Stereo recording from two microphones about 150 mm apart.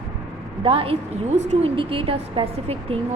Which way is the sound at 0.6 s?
40° right (ahead or behind).